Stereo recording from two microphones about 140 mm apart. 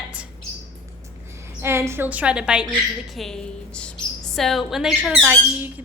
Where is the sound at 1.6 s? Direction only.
20° right (ahead or behind).